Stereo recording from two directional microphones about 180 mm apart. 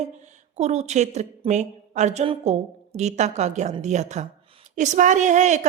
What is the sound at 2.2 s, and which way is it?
A woman's voice, 30° right (ahead or behind).